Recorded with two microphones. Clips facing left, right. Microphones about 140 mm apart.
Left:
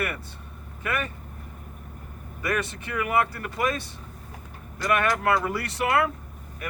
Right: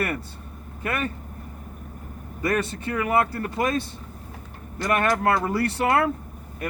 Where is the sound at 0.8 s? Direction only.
30° right (ahead or behind).